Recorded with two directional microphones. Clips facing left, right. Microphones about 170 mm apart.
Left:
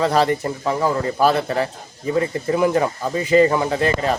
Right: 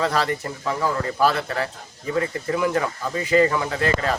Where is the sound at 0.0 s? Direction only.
20° left (ahead or behind).